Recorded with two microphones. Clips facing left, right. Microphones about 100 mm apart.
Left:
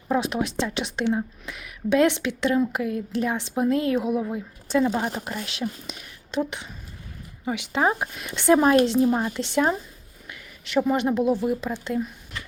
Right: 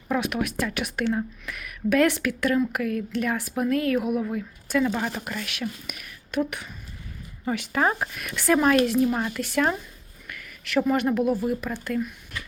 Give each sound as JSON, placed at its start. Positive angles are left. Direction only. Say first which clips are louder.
{"t": 0.1, "sound": "speech", "louder": "left 2 dB", "side_deg": 25}
{"t": 7.4, "sound": "speech", "louder": "left 1 dB", "side_deg": 15}